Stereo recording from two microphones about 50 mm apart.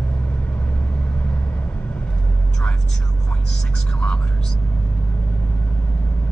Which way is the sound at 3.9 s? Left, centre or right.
Left.